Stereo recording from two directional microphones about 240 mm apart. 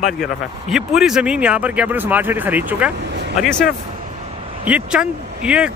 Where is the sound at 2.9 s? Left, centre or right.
Right.